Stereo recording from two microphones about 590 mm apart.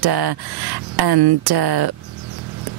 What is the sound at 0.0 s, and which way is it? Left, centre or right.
Speech, right.